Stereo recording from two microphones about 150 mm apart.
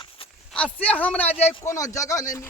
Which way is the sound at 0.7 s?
10° left (ahead or behind).